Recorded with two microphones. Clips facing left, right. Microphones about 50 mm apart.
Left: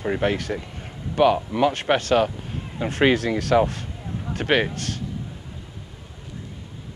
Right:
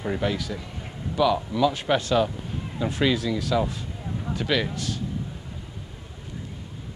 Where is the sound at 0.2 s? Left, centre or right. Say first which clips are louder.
Left 4 dB; left.